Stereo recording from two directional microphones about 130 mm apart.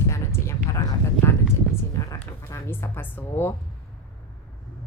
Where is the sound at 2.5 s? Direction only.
20° left (ahead or behind).